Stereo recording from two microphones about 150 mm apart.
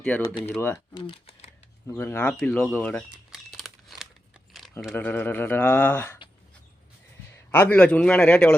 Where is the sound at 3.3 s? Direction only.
Centre (ahead or behind).